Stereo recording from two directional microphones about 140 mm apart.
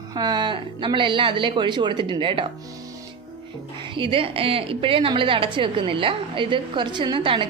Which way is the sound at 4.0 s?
40° right (ahead or behind).